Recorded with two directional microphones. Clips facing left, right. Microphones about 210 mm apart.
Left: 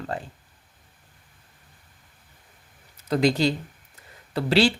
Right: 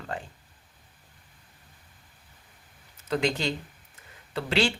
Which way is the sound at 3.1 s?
35° left (ahead or behind).